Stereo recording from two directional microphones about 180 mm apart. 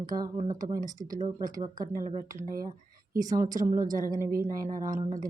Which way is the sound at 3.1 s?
20° right (ahead or behind).